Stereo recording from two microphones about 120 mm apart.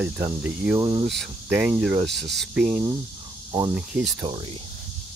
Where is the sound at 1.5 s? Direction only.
10° right (ahead or behind).